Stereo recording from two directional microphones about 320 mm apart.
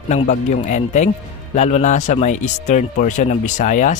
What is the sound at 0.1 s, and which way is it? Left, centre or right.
A man's voice, left.